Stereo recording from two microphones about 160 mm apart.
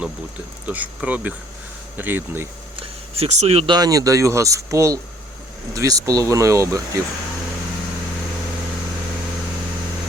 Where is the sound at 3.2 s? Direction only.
40° right (ahead or behind).